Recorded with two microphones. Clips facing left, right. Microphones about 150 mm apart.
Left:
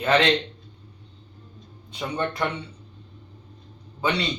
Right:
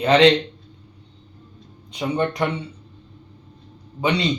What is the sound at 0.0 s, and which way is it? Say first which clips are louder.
Speech: right 6 dB; 20° right (ahead or behind).